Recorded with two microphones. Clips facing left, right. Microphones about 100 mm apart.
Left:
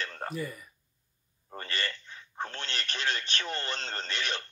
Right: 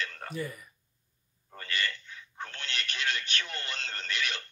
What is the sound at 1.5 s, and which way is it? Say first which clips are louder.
Telephone: right 1 dB; 35° left (ahead or behind).